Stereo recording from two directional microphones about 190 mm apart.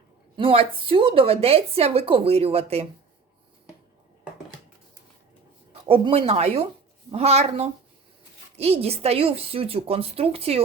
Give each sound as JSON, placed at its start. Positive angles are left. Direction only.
{"t": 0.3, "sound": "a woman's voice", "side_deg": -30}
{"t": 5.9, "sound": "a woman's voice", "side_deg": -30}